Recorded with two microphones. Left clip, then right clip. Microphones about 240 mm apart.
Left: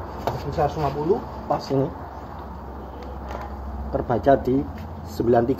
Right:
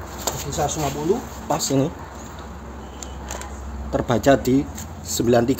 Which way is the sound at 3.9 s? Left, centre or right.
Right.